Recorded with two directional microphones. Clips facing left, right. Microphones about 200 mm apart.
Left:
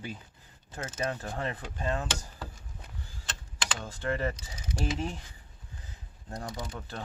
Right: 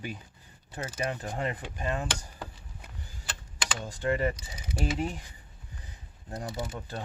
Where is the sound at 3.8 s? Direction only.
15° right (ahead or behind).